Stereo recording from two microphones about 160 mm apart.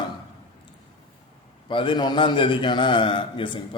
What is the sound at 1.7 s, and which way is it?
A man's voice, 30° left (ahead or behind).